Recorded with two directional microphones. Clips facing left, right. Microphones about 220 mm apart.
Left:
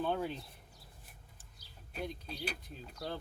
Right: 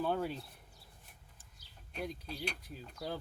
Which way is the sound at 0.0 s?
5° right (ahead or behind).